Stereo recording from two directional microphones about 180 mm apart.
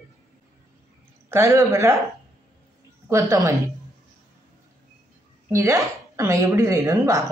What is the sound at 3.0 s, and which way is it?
Speech, 15° right (ahead or behind).